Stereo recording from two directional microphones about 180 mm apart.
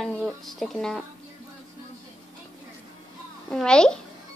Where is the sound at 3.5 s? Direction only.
5° left (ahead or behind).